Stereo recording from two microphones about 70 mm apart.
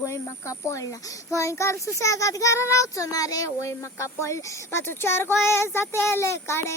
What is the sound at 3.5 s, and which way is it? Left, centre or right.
Speech, left.